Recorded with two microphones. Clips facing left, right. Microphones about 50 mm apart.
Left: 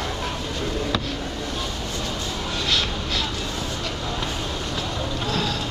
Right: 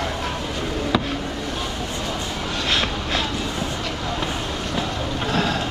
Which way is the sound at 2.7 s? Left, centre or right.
Right.